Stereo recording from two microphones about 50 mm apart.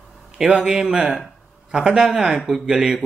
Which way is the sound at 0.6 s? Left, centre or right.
Centre.